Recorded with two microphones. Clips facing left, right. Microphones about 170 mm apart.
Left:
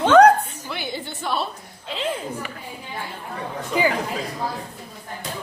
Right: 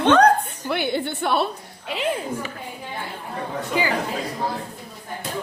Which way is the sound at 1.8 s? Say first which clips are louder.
Right 2 dB; 15° right (ahead or behind).